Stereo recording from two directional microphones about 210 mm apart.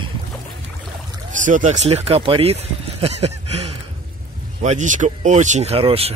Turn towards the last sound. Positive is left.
turn(degrees=-25)  # may be behind; listen again after turning